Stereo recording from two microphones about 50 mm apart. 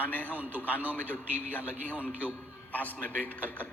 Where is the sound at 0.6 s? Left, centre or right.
Left.